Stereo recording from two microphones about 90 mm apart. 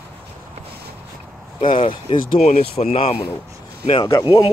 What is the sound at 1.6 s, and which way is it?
Speech, 70° left (ahead or behind).